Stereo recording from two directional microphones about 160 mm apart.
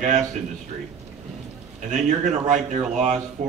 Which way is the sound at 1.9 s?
50° right (ahead or behind).